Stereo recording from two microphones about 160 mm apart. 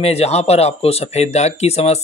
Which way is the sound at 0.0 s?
40° left (ahead or behind).